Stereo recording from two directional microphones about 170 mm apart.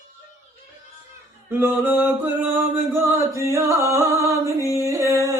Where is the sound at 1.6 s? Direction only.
10° right (ahead or behind).